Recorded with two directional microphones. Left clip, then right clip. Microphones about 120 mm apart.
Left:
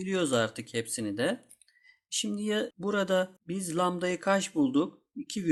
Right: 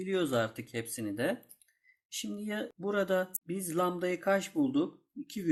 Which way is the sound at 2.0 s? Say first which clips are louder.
Left 7 dB; 40° left (ahead or behind).